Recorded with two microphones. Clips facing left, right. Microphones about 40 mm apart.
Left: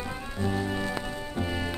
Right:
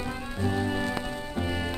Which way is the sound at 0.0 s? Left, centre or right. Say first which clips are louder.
Right 1 dB; centre.